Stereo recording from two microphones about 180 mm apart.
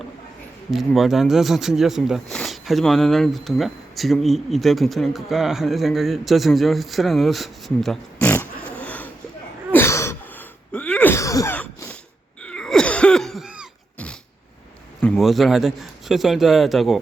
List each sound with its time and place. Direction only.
0.7 s speech: centre (ahead or behind)
8.8 s a sound: 10° left (ahead or behind)
10.7 s sneeze: 5° left (ahead or behind)
12.4 s cough: 5° left (ahead or behind)
15.0 s speech: 5° left (ahead or behind)